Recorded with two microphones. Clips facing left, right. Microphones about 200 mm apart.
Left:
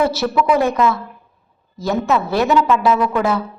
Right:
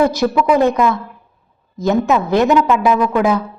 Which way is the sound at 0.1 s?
15° right (ahead or behind).